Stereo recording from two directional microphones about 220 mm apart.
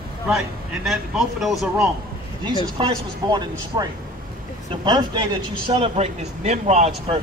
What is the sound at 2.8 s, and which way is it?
Speech, 20° right (ahead or behind).